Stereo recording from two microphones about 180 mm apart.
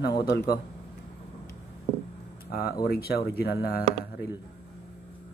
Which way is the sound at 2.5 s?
60° left (ahead or behind).